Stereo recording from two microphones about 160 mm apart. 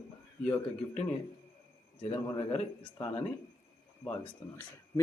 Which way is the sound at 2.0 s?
40° left (ahead or behind).